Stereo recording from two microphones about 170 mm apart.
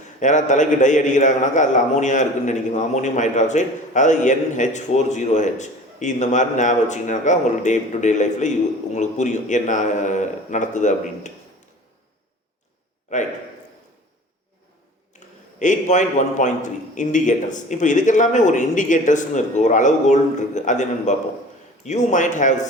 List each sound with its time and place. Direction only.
0.2 s a man's voice: 45° left (ahead or behind)
15.1 s a sound: 45° left (ahead or behind)
15.5 s a man's voice: 45° left (ahead or behind)